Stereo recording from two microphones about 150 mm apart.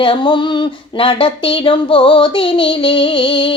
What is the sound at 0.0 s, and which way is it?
Speech, 35° left (ahead or behind).